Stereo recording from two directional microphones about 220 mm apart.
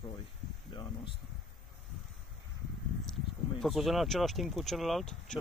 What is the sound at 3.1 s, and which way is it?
Speech, centre (ahead or behind).